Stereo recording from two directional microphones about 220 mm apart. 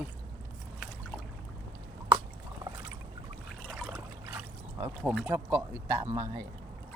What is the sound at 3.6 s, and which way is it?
Trickle, centre (ahead or behind).